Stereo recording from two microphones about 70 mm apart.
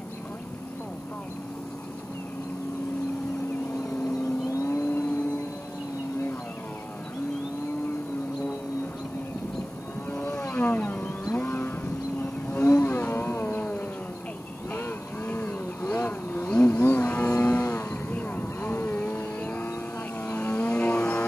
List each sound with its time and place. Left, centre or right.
4.0 s vehicle: left
10.1 s wild animals: centre
11.3 s cattle: left
12.6 s a sound: left
13.6 s a sound: left
14.7 s vehicle: left
16.4 s a sound: left
17.3 s cattle: left
18.1 s vehicle: left
20.2 s music: left